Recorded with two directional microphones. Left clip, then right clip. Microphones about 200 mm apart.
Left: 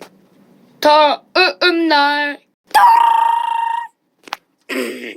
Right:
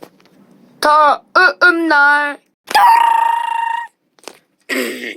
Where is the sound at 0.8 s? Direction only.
Centre (ahead or behind).